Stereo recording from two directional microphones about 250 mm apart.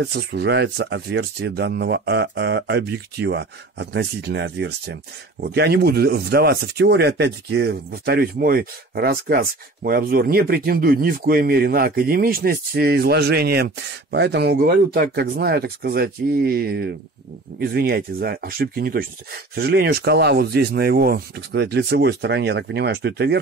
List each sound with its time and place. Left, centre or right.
0.0 s speech: right